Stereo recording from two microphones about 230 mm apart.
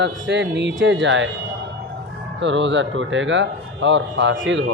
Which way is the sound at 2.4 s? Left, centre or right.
Right.